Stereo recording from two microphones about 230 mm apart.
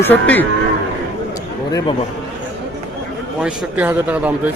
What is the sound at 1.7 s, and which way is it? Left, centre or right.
Speech, centre.